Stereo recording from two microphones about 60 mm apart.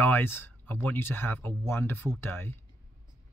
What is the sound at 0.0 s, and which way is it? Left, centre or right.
Speech, left.